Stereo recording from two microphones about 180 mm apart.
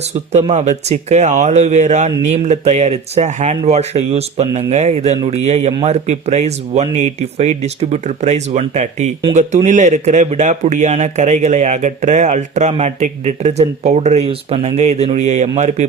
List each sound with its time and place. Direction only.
0.3 s a man's voice: 40° right (ahead or behind)